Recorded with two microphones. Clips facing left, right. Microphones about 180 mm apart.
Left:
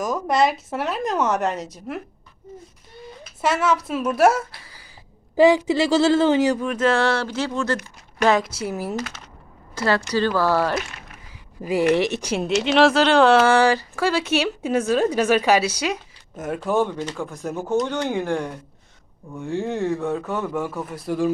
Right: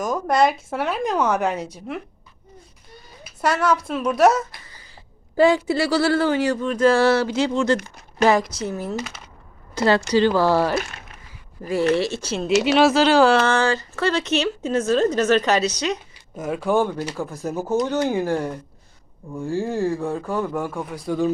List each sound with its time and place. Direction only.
0.0 s a man's voice: centre (ahead or behind)
3.4 s a man's voice: 5° left (ahead or behind)
6.7 s speech: centre (ahead or behind); by 7.8 s 15° right (ahead or behind)
8.3 s a man's voice: 5° left (ahead or behind)
9.7 s speech: 20° right (ahead or behind)
11.6 s speech: 15° left (ahead or behind)
12.6 s a man's voice: 5° right (ahead or behind)